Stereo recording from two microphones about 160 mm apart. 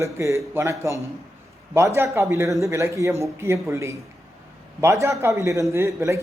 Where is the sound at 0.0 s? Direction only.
20° right (ahead or behind).